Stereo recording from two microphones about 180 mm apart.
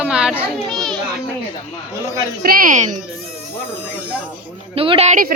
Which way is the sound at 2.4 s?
50° right (ahead or behind).